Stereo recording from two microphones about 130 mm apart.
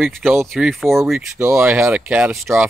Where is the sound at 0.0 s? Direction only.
Centre (ahead or behind).